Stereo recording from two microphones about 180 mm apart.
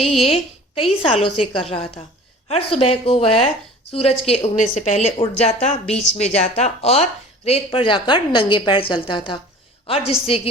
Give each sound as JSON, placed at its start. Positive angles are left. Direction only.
{"t": 0.8, "sound": "a woman's voice", "side_deg": 30}